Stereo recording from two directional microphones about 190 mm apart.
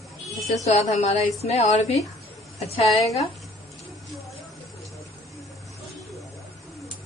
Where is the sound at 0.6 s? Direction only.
35° left (ahead or behind).